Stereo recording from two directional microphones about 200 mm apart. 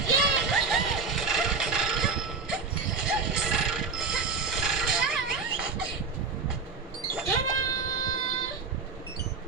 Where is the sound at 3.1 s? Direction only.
5° right (ahead or behind).